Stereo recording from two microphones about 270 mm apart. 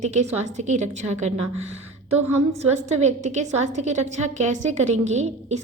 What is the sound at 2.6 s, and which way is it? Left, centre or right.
A woman's voice, right.